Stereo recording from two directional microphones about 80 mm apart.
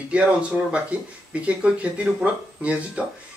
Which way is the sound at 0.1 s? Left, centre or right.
Centre.